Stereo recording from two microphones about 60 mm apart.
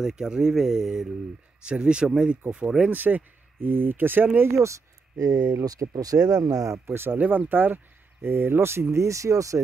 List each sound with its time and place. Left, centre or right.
0.0 s speech: centre
2.9 s speech: right
4.5 s speech: right
6.9 s speech: right